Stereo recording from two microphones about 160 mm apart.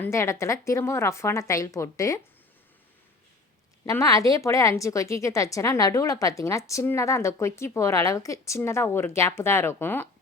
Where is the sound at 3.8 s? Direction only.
20° left (ahead or behind).